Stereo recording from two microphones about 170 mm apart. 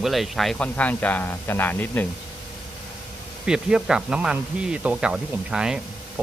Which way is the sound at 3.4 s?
5° right (ahead or behind).